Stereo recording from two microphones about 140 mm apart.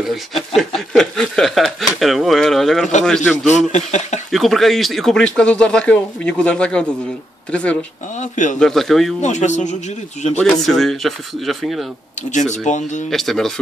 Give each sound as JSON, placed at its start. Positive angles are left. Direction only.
{"t": 0.0, "sound": "speech", "side_deg": 0}
{"t": 3.4, "sound": "speech", "side_deg": 55}
{"t": 4.3, "sound": "speech", "side_deg": 0}
{"t": 8.2, "sound": "speech", "side_deg": 60}
{"t": 8.5, "sound": "speech", "side_deg": 5}
{"t": 9.2, "sound": "speech", "side_deg": 55}
{"t": 10.3, "sound": "speech", "side_deg": 5}
{"t": 12.2, "sound": "speech", "side_deg": 60}
{"t": 13.1, "sound": "speech", "side_deg": 0}